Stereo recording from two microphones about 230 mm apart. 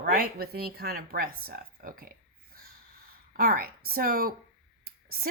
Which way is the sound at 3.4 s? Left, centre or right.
Right.